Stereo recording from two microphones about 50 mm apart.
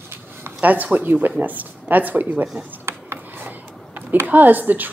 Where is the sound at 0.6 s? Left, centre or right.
Right.